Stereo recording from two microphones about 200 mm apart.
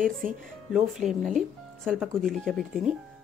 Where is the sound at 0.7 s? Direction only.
Centre (ahead or behind).